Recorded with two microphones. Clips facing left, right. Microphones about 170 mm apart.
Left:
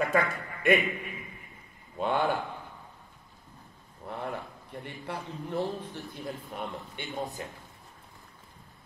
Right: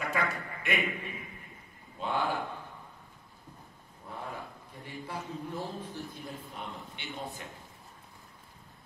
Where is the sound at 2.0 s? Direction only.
55° left (ahead or behind).